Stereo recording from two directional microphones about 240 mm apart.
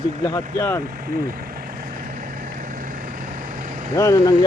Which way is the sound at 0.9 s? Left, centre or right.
Right.